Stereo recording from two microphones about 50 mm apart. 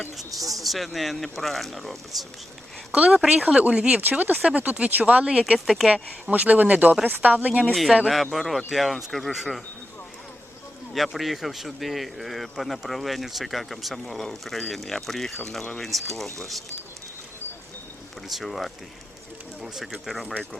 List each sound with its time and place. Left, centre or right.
0.0 s speech: centre
2.9 s speech: centre
4.2 s speech: right
5.5 s speech: centre
6.4 s speech: right
7.7 s speech: centre
10.9 s speech: centre
18.3 s speech: centre